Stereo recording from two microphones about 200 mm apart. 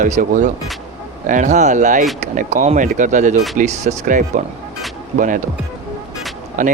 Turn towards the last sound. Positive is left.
turn(degrees=-40)  # may be behind; listen again after turning